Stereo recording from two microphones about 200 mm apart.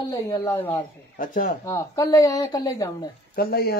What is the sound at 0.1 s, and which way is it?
Speech, 20° left (ahead or behind).